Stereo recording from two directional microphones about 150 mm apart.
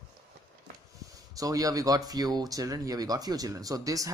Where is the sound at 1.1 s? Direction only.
25° right (ahead or behind).